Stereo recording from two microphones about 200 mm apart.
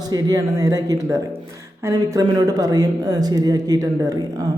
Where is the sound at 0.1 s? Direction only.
15° right (ahead or behind).